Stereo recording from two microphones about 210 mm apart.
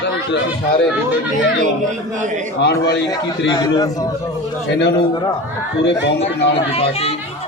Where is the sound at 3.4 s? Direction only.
20° left (ahead or behind).